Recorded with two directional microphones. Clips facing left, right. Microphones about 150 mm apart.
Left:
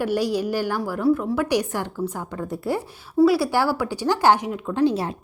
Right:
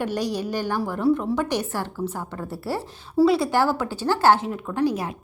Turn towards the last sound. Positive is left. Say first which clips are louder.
# left 3 dB
turn(degrees=30)  # may be behind; listen again after turning